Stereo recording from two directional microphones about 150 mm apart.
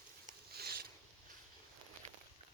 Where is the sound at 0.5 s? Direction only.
90° right.